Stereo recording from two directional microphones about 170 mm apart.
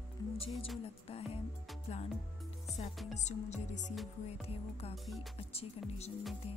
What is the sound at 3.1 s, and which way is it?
Speech, 45° left (ahead or behind).